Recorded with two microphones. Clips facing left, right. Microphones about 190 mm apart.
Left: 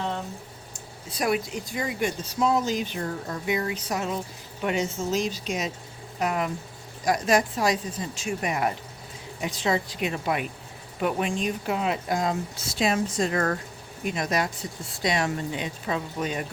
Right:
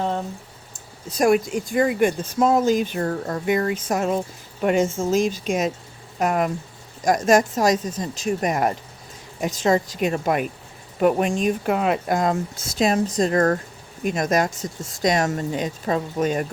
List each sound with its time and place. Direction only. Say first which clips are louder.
1.0 s speech: right 8 dB; 45° right (ahead or behind)